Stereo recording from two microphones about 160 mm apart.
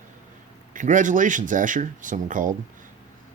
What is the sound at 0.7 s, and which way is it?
Speech, 55° right (ahead or behind).